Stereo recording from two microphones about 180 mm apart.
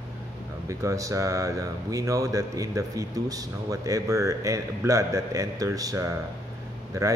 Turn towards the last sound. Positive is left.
turn(degrees=-20)  # may be behind; listen again after turning